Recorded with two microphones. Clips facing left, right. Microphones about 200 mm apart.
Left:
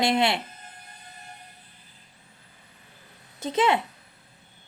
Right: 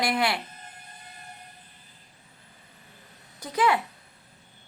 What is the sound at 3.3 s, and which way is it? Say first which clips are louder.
Speech: left 2 dB; 25° left (ahead or behind).